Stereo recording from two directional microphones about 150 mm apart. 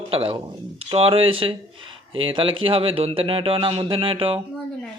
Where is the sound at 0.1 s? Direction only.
35° right (ahead or behind).